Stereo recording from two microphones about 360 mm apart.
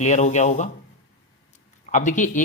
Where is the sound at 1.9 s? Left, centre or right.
Centre.